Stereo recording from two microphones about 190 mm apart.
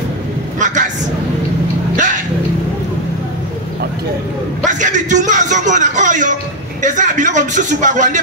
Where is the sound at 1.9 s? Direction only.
40° right (ahead or behind).